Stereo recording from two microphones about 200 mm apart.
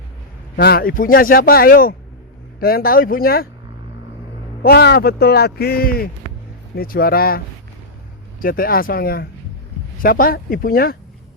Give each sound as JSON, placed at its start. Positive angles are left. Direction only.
{"t": 0.5, "sound": "a man's voice", "side_deg": 50}
{"t": 4.6, "sound": "a man's voice", "side_deg": 50}